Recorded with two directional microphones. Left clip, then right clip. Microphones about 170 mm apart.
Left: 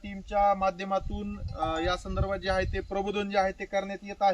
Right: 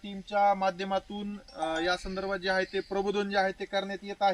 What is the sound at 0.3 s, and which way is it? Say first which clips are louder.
Speech: left 1 dB; 10° left (ahead or behind).